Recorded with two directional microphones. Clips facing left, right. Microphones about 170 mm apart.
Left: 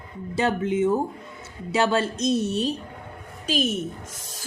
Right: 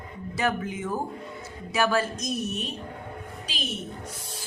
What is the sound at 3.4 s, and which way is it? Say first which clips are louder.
Speech: left 12 dB; 45° left (ahead or behind).